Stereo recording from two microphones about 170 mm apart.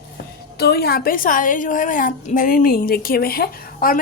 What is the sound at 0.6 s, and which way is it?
A woman's voice, 70° left (ahead or behind).